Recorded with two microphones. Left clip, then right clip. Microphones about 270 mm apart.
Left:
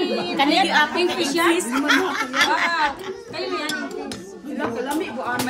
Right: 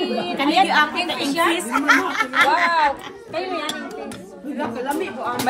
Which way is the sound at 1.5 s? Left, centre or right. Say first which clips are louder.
Right 2 dB; right.